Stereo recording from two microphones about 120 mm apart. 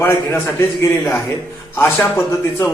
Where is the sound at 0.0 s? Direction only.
20° left (ahead or behind).